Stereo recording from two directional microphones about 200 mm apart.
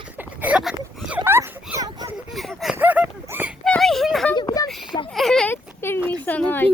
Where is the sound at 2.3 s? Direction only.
Centre (ahead or behind).